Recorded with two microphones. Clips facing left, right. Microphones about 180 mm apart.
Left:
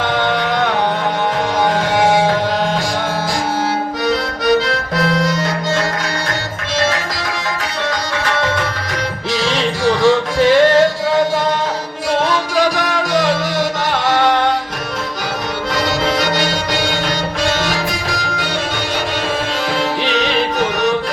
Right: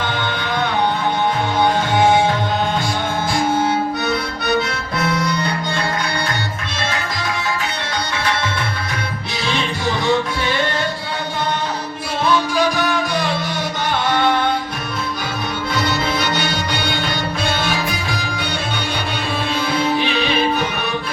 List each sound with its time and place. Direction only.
0.0 s music: 90° left
2.0 s music: 90° left
4.0 s accordion: 90° left
6.7 s tabla: 90° left
8.2 s music: 90° left
15.7 s music: 90° left
19.7 s music: 80° left